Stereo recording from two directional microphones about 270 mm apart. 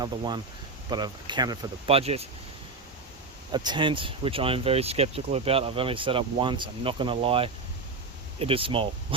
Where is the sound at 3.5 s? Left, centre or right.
Centre.